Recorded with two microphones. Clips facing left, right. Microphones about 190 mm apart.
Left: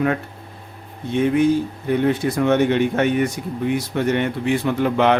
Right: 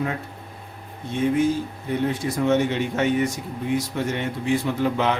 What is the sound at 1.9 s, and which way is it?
Speech, 65° left (ahead or behind).